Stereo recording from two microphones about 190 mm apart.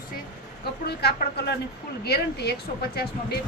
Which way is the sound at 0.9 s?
55° left (ahead or behind).